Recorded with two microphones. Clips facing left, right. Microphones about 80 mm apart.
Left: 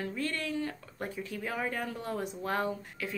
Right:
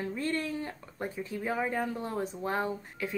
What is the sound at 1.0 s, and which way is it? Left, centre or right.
Speech, right.